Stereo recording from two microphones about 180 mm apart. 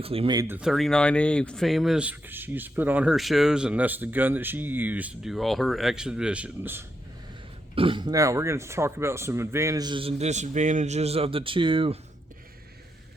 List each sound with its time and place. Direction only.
0.0 s speech: 30° right (ahead or behind)
0.3 s speech: 10° right (ahead or behind)
7.8 s speech: 30° right (ahead or behind)